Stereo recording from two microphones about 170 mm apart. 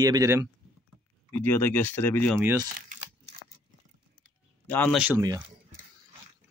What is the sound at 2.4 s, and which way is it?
Speech, 20° right (ahead or behind).